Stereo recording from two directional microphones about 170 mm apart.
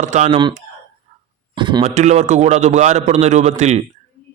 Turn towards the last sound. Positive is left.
turn(degrees=-40)  # may be behind; listen again after turning